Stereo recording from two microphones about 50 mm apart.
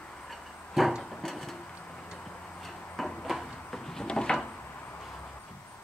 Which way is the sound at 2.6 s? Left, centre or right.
Centre.